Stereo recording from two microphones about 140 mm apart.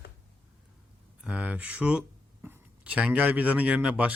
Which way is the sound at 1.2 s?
10° right (ahead or behind).